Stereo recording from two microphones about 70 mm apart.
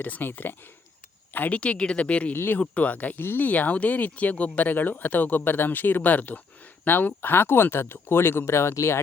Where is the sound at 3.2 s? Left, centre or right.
Left.